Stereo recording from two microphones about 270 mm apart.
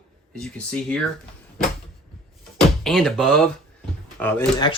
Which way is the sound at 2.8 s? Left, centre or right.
Centre.